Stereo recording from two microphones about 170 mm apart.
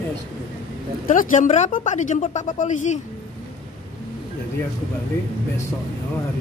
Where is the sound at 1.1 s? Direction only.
50° left (ahead or behind).